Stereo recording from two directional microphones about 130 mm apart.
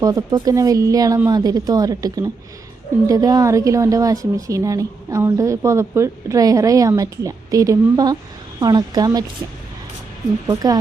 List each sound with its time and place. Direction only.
0.0 s a woman's voice: 25° right (ahead or behind)
10.4 s a woman's voice: 30° right (ahead or behind)